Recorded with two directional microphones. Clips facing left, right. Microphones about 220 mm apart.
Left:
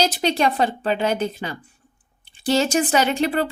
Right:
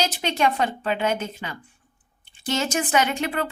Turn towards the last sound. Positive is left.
turn(degrees=35)  # may be behind; listen again after turning